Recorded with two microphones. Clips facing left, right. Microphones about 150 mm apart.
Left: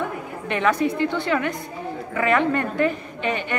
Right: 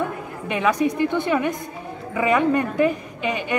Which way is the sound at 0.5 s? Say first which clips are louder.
Right 1 dB; 10° right (ahead or behind).